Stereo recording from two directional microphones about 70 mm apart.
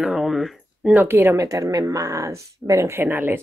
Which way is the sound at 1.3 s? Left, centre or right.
Right.